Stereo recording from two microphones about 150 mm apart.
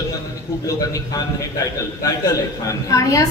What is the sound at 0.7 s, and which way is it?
A man's voice, 25° left (ahead or behind).